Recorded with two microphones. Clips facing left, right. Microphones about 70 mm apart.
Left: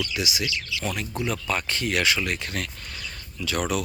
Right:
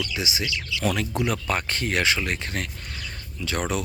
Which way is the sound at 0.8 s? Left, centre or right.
Right.